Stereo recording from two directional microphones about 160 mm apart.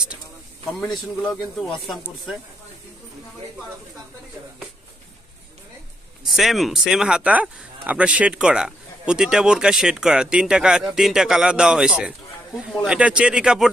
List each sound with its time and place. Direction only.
0.7 s speech: centre (ahead or behind)
6.2 s speech: centre (ahead or behind)